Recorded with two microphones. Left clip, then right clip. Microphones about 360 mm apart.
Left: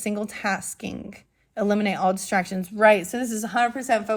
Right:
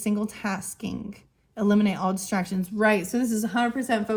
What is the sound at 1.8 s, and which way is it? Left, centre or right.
A woman's voice, centre.